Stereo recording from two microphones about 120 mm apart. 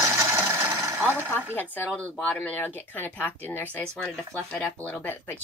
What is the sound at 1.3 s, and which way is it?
Speech, 15° left (ahead or behind).